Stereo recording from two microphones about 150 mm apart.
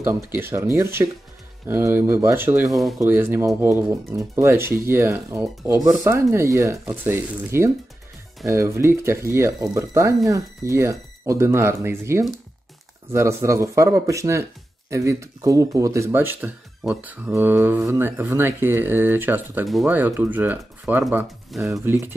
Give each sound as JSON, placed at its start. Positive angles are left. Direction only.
{"t": 0.0, "sound": "speech", "side_deg": -15}
{"t": 2.7, "sound": "speech", "side_deg": 0}
{"t": 3.0, "sound": "speech", "side_deg": -15}
{"t": 19.6, "sound": "speech", "side_deg": 0}
{"t": 19.9, "sound": "speech", "side_deg": -15}